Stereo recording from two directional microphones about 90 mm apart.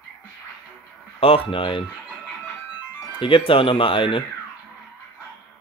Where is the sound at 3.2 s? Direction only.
75° left (ahead or behind).